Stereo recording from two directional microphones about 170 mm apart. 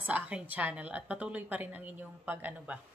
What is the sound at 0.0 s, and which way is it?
A woman's voice, 10° right (ahead or behind).